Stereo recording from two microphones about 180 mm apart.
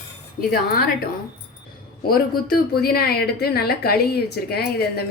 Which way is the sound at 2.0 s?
55° left (ahead or behind).